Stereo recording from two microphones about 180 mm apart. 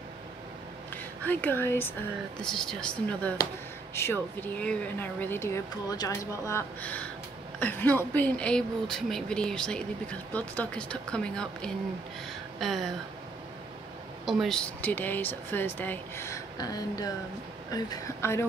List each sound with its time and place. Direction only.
1.2 s speech: 10° left (ahead or behind)
12.5 s a sound: centre (ahead or behind)
14.2 s speech: centre (ahead or behind); by 18.4 s 20° left (ahead or behind)